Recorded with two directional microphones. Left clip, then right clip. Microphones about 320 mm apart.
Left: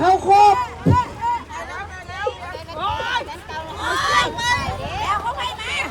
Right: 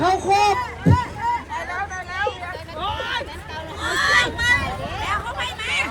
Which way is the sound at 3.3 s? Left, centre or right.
Centre.